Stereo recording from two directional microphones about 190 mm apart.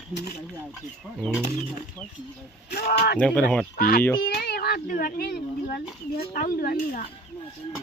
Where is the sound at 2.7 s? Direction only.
50° left (ahead or behind).